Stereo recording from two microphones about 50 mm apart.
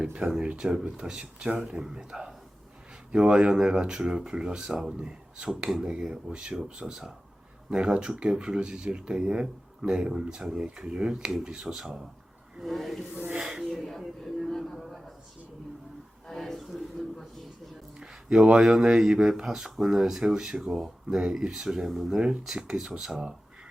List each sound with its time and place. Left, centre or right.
0.0 s speech: right
12.6 s speech: centre
13.7 s speech: centre
14.3 s a sound: centre
16.2 s a sound: centre
18.0 s speech: centre